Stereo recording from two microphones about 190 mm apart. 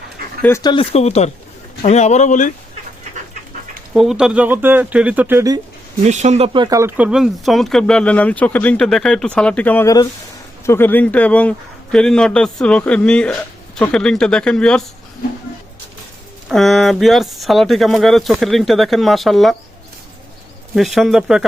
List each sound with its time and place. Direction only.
0.4 s a man's voice: 15° left (ahead or behind); by 2.5 s 40° left (ahead or behind)
3.9 s speech: 5° right (ahead or behind)
6.1 s speech: 35° right (ahead or behind); by 14.8 s 5° left (ahead or behind)
16.5 s speech: centre (ahead or behind)
20.7 s speech: centre (ahead or behind)